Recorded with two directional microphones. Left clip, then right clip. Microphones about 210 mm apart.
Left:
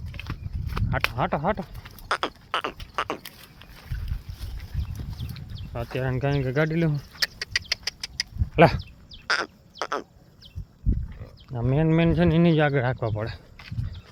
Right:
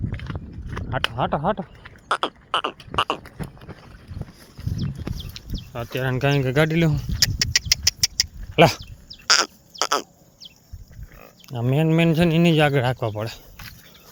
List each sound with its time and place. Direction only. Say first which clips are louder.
0.3 s a sound: right 3 dB; 10° right (ahead or behind)
5.4 s a sound: right 7 dB; 10° right (ahead or behind)
5.7 s speech: right 3 dB; 10° right (ahead or behind)
6.1 s speech: right 6 dB; 20° right (ahead or behind)
7.7 s vehicle: right 9 dB; 25° right (ahead or behind)
8.5 s speech: right 2 dB; 10° right (ahead or behind)
9.2 s crow: right 7 dB; 15° right (ahead or behind)
11.4 s speech: right 2 dB; 15° right (ahead or behind)